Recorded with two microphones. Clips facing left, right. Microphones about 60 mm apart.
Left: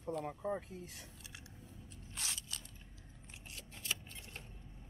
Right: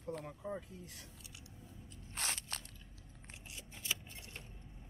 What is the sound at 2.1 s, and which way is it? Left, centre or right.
Crunch, right.